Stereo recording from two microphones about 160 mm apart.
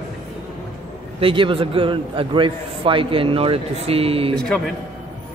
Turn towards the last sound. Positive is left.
turn(degrees=5)  # may be behind; listen again after turning